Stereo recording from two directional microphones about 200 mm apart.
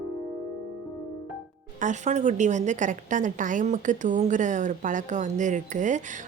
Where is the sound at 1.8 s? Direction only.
35° right (ahead or behind).